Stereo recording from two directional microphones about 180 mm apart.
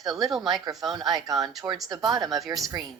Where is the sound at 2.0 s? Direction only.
Centre (ahead or behind).